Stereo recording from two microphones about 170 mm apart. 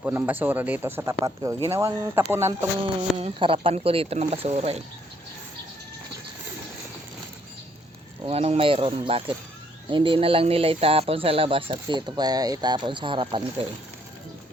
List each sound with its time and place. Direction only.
0.0 s speech: 10° right (ahead or behind)
3.2 s speech: 35° right (ahead or behind)
8.3 s speech: 35° right (ahead or behind)